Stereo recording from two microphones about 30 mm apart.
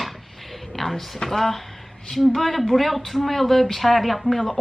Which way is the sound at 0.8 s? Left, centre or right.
Centre.